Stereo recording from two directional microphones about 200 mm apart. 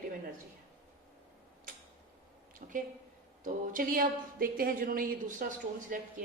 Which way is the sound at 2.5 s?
45° right (ahead or behind).